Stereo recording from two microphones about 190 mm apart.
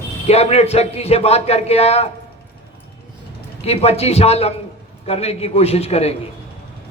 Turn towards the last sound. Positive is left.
turn(degrees=35)  # may be behind; listen again after turning